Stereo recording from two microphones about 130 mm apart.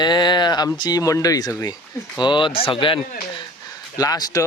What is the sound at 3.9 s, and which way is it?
Speech, 30° left (ahead or behind).